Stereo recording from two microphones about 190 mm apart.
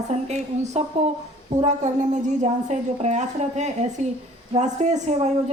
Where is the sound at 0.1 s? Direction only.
35° right (ahead or behind).